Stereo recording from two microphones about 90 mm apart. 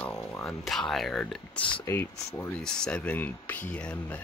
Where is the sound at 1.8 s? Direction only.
25° left (ahead or behind).